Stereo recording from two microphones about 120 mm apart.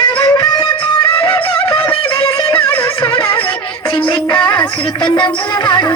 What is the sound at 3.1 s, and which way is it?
Music, 50° left (ahead or behind).